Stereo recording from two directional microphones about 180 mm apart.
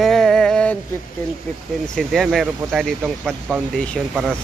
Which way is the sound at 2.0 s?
Centre (ahead or behind).